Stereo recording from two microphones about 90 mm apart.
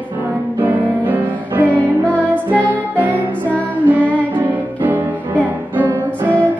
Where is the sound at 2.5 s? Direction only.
15° left (ahead or behind).